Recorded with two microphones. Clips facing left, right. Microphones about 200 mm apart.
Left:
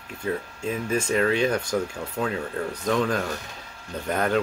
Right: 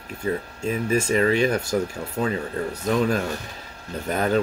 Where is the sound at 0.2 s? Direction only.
10° right (ahead or behind).